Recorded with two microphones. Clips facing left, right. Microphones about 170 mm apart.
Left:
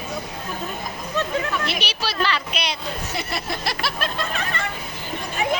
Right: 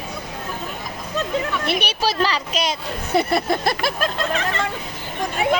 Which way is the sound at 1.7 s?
55° right (ahead or behind).